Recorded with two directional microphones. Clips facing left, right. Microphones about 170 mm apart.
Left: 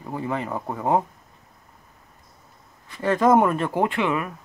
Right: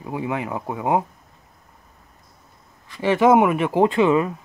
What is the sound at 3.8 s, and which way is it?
Speech, 25° right (ahead or behind).